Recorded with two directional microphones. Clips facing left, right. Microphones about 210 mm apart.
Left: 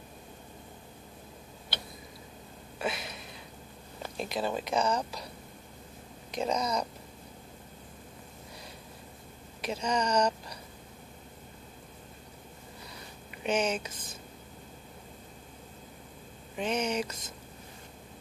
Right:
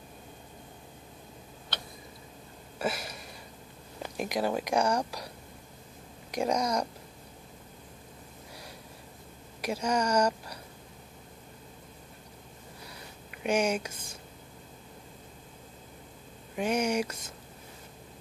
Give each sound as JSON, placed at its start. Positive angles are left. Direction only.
{"t": 2.8, "sound": "a sound", "side_deg": -10}
{"t": 4.0, "sound": "speech", "side_deg": -15}
{"t": 6.3, "sound": "speech", "side_deg": -10}
{"t": 9.6, "sound": "a woman's voice", "side_deg": -10}
{"t": 13.4, "sound": "speech", "side_deg": -10}
{"t": 16.5, "sound": "speech", "side_deg": -10}